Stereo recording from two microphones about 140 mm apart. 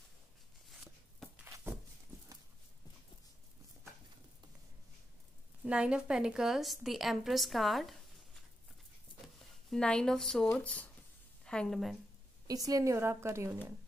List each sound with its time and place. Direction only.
1.5 s walk: 15° right (ahead or behind)
5.6 s a woman's voice: 10° right (ahead or behind)
9.4 s a woman's voice: centre (ahead or behind)
12.4 s a woman's voice: 25° right (ahead or behind)